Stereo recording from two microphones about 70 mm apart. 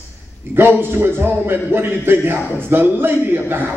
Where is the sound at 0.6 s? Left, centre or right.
Right.